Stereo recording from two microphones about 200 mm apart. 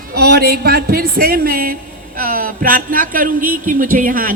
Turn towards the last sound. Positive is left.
turn(degrees=-45)  # may be behind; listen again after turning